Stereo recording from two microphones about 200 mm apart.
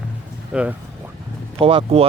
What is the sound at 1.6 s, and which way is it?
Speech, 25° right (ahead or behind).